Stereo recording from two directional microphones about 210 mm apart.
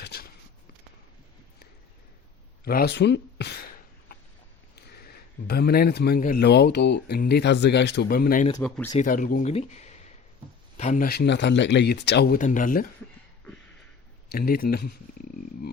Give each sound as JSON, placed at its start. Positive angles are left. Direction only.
{"t": 0.0, "sound": "a sound", "side_deg": 50}
{"t": 2.6, "sound": "speech", "side_deg": 50}
{"t": 4.7, "sound": "a man's voice", "side_deg": 50}
{"t": 8.6, "sound": "speech", "side_deg": 5}
{"t": 9.0, "sound": "speech", "side_deg": 40}
{"t": 14.3, "sound": "speech", "side_deg": 45}